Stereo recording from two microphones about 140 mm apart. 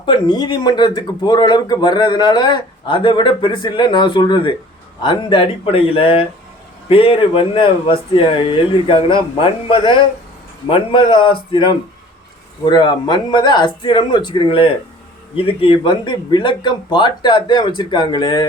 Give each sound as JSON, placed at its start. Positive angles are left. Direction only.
{"t": 0.0, "sound": "speech", "side_deg": 35}